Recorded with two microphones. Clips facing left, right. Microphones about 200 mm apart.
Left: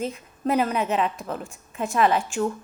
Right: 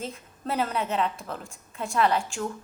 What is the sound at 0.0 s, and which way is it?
A woman's voice, 15° left (ahead or behind).